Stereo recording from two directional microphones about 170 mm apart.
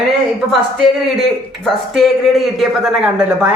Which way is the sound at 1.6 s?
Centre (ahead or behind).